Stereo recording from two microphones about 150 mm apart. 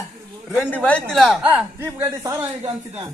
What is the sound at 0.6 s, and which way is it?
Speech, 10° left (ahead or behind).